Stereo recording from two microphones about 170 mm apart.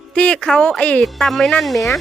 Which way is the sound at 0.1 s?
5° left (ahead or behind).